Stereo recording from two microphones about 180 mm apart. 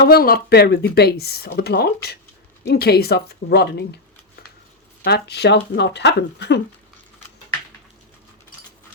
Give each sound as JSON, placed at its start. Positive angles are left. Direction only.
{"t": 0.0, "sound": "speech", "side_deg": 55}
{"t": 5.0, "sound": "speech", "side_deg": 65}